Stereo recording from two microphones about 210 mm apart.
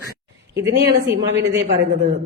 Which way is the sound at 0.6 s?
50° right (ahead or behind).